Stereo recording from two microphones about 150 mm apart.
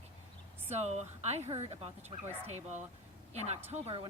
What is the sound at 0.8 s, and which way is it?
Speech, 45° right (ahead or behind).